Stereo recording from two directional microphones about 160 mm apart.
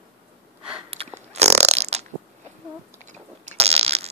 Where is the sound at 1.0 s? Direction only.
35° right (ahead or behind).